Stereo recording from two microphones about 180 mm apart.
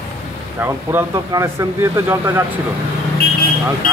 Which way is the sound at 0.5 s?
15° right (ahead or behind).